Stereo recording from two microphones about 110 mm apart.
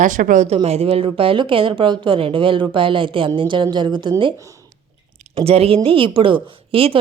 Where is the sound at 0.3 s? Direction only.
75° right (ahead or behind); by 4.1 s 45° right (ahead or behind).